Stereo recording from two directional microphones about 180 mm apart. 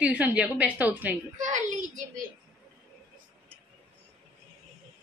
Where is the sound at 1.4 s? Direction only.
40° right (ahead or behind).